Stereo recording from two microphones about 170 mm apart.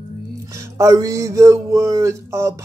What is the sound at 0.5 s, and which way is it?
Music, 20° right (ahead or behind).